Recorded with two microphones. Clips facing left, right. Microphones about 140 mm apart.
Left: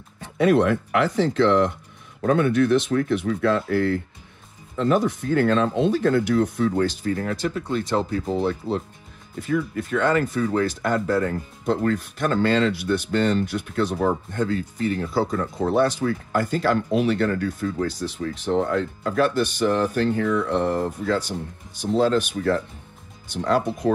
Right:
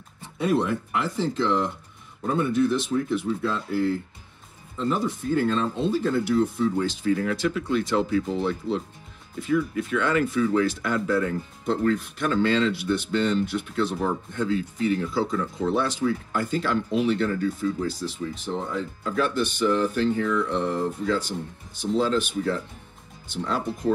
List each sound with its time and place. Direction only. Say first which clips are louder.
0.2 s speech: left 6 dB; 70° left (ahead or behind)
7.0 s speech: right 1 dB; 45° left (ahead or behind)
19.8 s speech: left 2 dB; 55° left (ahead or behind)